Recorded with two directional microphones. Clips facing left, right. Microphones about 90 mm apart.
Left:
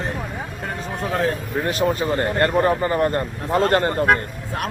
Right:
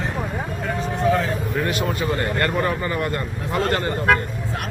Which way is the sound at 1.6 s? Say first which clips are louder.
Left 6 dB; 35° left (ahead or behind).